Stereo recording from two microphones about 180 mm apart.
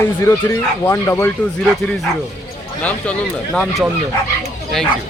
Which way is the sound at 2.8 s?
5° left (ahead or behind).